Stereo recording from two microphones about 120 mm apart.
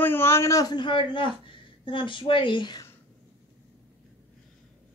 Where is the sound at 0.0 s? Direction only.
20° left (ahead or behind); by 2.8 s 40° left (ahead or behind).